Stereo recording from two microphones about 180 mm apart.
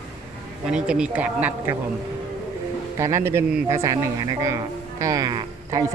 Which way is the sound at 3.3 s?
15° right (ahead or behind).